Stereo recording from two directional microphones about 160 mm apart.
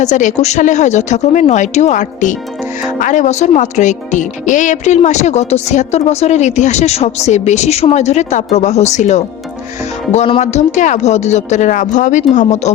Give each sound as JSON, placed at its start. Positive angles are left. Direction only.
{"t": 0.0, "sound": "speech", "side_deg": 50}